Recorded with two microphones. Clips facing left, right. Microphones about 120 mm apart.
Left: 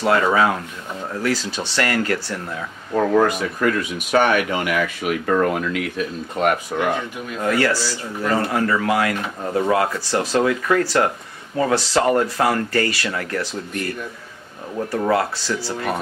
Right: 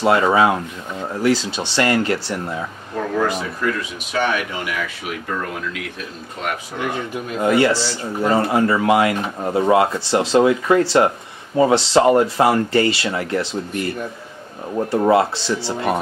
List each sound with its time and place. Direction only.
0.0 s speech: 25° right (ahead or behind)
3.6 s speech: 55° left (ahead or behind)
7.3 s speech: 25° right (ahead or behind)